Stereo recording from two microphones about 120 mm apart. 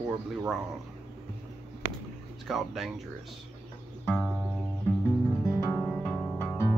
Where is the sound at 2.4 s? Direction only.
Centre (ahead or behind).